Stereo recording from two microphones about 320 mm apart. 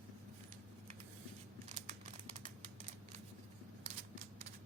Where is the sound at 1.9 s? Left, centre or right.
Centre.